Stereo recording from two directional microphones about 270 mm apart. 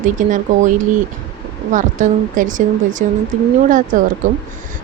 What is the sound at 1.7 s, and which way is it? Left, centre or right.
Speech, right.